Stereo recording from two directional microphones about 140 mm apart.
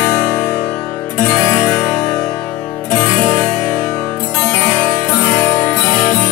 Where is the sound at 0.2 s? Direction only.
15° left (ahead or behind).